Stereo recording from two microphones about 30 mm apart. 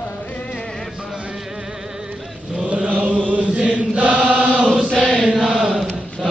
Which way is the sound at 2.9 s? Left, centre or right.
Right.